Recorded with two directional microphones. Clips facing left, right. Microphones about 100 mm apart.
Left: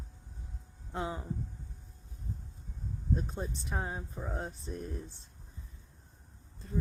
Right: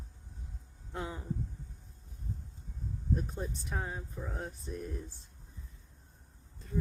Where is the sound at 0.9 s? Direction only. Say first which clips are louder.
Left 3 dB; 25° left (ahead or behind).